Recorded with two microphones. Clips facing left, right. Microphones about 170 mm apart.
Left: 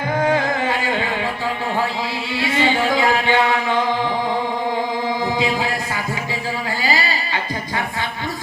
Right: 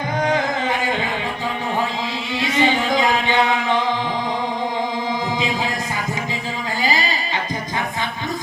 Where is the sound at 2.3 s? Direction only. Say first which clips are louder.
Right 1 dB; 20° right (ahead or behind).